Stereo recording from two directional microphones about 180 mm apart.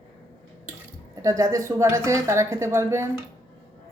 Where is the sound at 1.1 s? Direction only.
20° right (ahead or behind).